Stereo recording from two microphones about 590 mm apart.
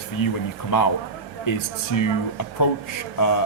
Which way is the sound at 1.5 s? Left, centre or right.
Left.